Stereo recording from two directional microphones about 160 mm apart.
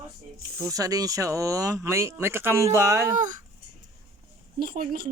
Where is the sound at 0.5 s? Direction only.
20° right (ahead or behind).